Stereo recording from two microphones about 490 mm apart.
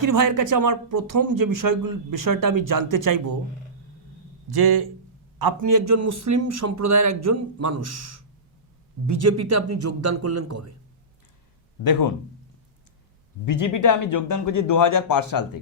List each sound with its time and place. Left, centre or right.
0.0 s speech: right
4.4 s a man's voice: right
11.8 s speech: left
13.4 s speech: left